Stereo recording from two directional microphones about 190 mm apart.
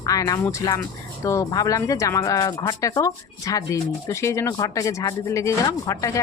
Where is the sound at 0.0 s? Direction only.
20° left (ahead or behind).